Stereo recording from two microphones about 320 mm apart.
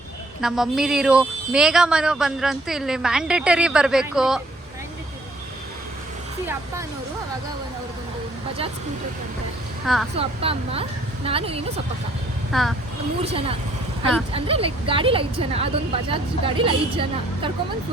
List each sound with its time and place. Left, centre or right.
0.4 s speech: centre
9.8 s speech: centre
10.2 s a woman's voice: centre
12.5 s speech: centre
13.2 s a woman's voice: centre